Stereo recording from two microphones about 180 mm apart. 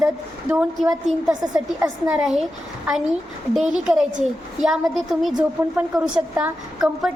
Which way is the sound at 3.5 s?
5° right (ahead or behind).